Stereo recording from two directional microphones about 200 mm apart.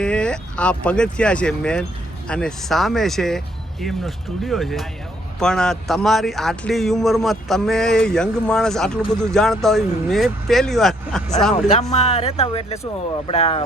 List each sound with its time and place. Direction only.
0.0 s a sound: 5° left (ahead or behind)
0.9 s speech: 5° left (ahead or behind)
11.7 s speech: 30° left (ahead or behind)